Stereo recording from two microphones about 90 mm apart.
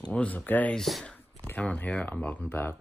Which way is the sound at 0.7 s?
Centre (ahead or behind).